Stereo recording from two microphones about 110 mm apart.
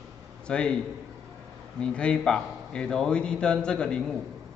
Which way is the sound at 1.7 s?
10° left (ahead or behind).